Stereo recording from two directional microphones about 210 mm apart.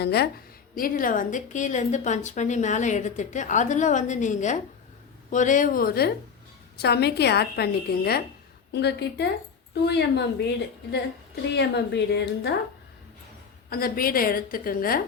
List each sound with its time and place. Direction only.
0.0 s a woman's voice: 50° left (ahead or behind)
11.5 s a woman's voice: 55° left (ahead or behind)
13.7 s a woman's voice: 45° left (ahead or behind)